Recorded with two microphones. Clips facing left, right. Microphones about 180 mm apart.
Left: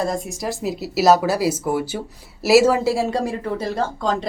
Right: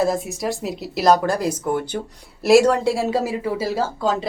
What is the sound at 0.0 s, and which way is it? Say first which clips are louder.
A woman's voice: right 3 dB; centre (ahead or behind).